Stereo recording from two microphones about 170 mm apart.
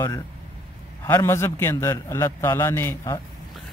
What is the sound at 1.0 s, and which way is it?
A man's voice, 15° left (ahead or behind).